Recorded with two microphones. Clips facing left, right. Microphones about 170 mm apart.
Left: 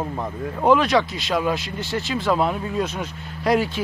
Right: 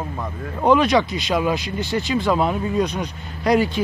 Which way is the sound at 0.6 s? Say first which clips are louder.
Right 1 dB; centre (ahead or behind).